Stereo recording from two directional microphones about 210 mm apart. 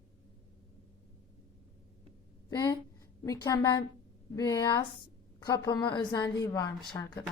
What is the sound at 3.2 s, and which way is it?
A woman's voice, 15° left (ahead or behind).